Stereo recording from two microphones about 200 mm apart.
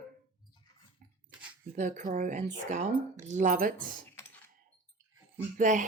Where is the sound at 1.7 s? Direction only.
40° right (ahead or behind).